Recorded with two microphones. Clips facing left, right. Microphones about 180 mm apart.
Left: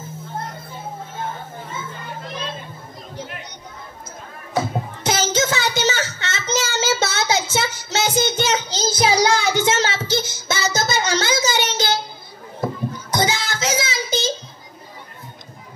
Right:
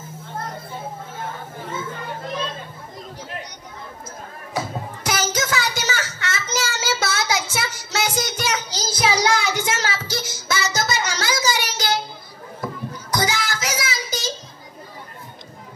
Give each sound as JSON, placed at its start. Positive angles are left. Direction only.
{"t": 5.0, "sound": "child singing", "side_deg": 25}
{"t": 13.1, "sound": "child singing", "side_deg": 25}